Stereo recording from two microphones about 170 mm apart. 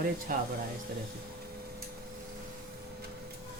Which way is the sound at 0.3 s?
55° right (ahead or behind).